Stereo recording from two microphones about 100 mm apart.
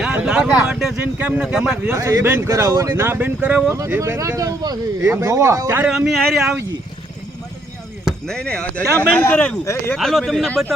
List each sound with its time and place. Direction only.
0.0 s a sound: 5° right (ahead or behind)
1.0 s speech: 15° right (ahead or behind)
2.0 s speech: 30° right (ahead or behind)
2.5 s speech: 35° right (ahead or behind); by 3.8 s 20° right (ahead or behind)
4.0 s speech: 30° right (ahead or behind)
5.9 s speech: 5° right (ahead or behind)
8.0 s speech: 10° left (ahead or behind)
10.0 s speech: centre (ahead or behind)